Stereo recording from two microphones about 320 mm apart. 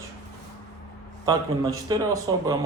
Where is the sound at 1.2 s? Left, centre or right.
Centre.